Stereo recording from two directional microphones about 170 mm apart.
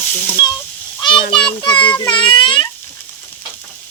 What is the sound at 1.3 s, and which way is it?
A child's voice, 30° left (ahead or behind).